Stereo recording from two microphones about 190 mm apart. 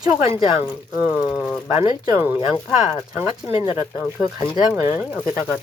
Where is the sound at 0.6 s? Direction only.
5° right (ahead or behind).